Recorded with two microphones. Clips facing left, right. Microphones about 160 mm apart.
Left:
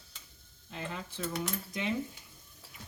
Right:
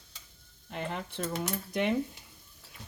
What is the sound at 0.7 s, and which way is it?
Speech, 60° right (ahead or behind).